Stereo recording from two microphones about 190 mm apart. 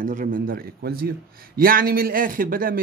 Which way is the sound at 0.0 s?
45° right (ahead or behind).